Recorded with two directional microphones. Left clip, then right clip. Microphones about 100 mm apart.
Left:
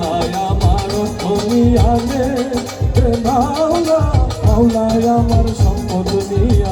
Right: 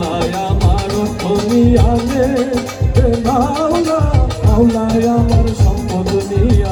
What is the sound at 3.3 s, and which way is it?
Music, 15° left (ahead or behind).